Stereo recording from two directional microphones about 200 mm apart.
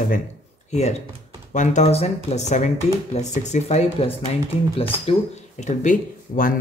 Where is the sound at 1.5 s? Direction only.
35° left (ahead or behind).